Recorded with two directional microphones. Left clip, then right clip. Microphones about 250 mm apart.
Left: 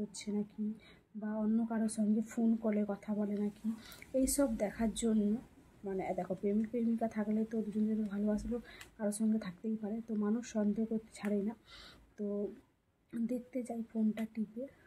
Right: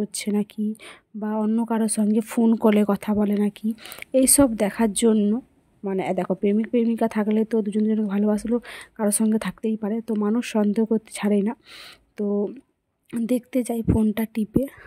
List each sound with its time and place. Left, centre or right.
0.1 s speech: right